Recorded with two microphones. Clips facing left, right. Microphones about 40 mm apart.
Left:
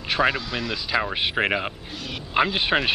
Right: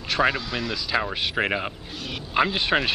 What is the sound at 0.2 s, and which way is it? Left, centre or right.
Speech, centre.